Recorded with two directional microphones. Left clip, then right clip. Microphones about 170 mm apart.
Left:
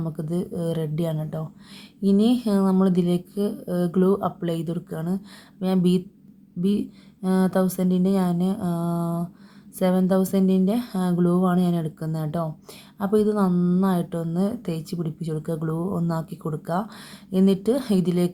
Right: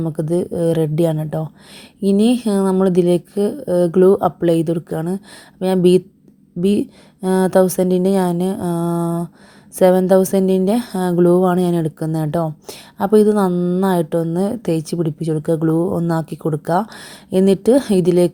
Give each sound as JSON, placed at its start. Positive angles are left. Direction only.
{"t": 0.0, "sound": "a woman's voice", "side_deg": -35}
{"t": 13.5, "sound": "speech", "side_deg": -30}
{"t": 13.8, "sound": "a woman's voice", "side_deg": -40}